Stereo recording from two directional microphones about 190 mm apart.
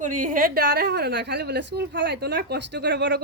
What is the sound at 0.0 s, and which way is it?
A woman's voice, 40° right (ahead or behind).